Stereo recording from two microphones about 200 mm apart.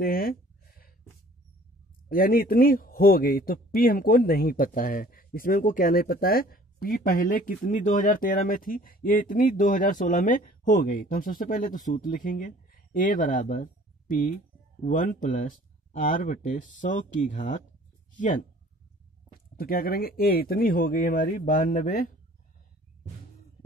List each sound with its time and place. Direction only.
0.0 s a sound: 45° left (ahead or behind)
2.0 s speech: 45° left (ahead or behind)
19.6 s speech: 45° left (ahead or behind)